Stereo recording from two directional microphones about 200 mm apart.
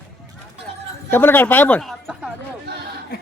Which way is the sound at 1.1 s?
10° left (ahead or behind).